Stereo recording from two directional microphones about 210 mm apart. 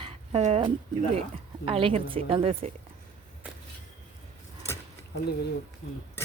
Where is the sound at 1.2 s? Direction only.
25° right (ahead or behind).